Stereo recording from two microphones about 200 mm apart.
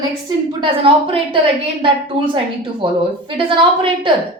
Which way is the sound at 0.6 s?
25° right (ahead or behind).